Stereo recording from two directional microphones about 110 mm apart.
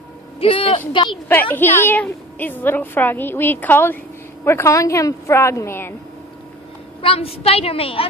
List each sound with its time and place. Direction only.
0.4 s a woman's voice: 55° left (ahead or behind)
1.3 s a woman's voice: 20° left (ahead or behind)
7.0 s a woman's voice: 60° left (ahead or behind)